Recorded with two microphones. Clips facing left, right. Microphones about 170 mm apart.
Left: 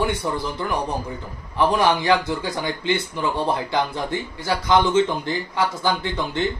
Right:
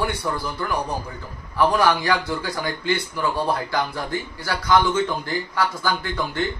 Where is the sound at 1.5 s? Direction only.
20° left (ahead or behind).